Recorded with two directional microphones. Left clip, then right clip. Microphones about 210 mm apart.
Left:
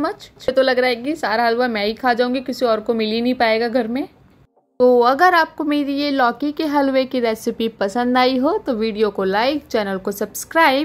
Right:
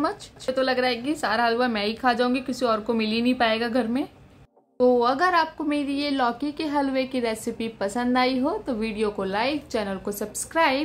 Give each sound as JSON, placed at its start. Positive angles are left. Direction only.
{"t": 0.5, "sound": "a woman's voice", "side_deg": 30}
{"t": 4.7, "sound": "a woman's voice", "side_deg": 30}